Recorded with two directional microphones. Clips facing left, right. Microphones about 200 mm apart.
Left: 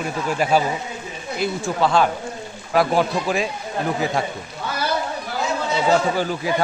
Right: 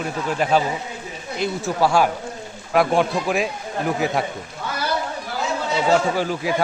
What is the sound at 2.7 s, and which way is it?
Speech, centre (ahead or behind).